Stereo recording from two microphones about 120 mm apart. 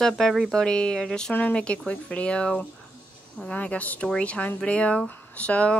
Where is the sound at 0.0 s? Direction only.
Centre (ahead or behind).